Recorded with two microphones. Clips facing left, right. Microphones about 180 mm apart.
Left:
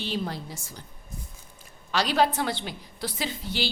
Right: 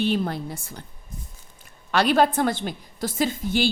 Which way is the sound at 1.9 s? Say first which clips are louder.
Right 4 dB; 55° right (ahead or behind).